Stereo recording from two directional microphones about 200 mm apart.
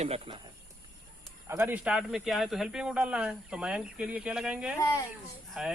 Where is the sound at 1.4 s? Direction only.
10° right (ahead or behind).